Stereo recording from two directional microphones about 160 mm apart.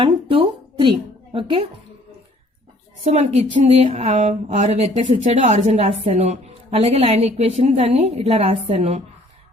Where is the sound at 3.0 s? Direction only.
40° right (ahead or behind).